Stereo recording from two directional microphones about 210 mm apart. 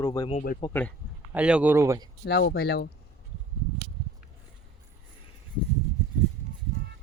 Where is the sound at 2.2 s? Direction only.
55° left (ahead or behind).